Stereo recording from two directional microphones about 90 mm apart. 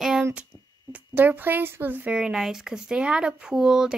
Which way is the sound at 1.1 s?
20° right (ahead or behind).